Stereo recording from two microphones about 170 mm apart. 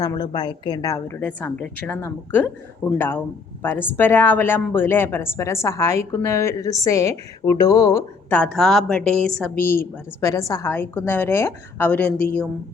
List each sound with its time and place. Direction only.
0.0 s a woman's voice: 25° left (ahead or behind); by 12.5 s 10° left (ahead or behind)